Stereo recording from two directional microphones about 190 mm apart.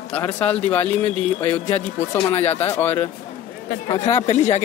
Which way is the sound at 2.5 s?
10° left (ahead or behind).